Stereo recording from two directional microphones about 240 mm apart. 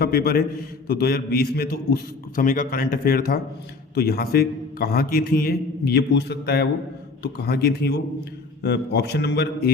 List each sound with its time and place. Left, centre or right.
0.0 s a man's voice: left